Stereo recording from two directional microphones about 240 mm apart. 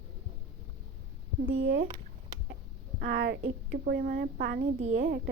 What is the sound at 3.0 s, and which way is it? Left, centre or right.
Speech, right.